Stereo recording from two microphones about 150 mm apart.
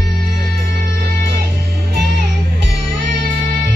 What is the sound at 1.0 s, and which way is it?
Music, 90° right.